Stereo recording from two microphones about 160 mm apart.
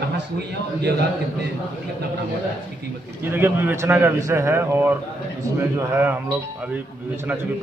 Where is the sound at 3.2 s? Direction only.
15° right (ahead or behind).